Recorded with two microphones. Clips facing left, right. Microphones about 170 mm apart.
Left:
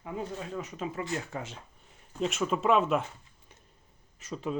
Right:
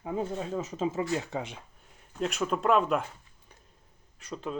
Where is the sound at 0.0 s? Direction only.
30° right (ahead or behind).